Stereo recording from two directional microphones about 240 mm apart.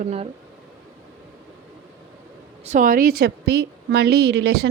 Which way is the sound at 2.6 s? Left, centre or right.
Right.